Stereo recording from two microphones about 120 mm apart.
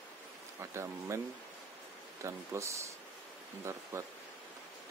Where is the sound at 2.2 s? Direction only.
25° right (ahead or behind).